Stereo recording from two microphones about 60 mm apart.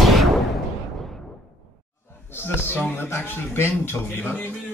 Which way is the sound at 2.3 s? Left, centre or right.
Left.